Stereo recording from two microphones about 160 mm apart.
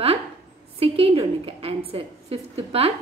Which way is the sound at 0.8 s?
35° right (ahead or behind).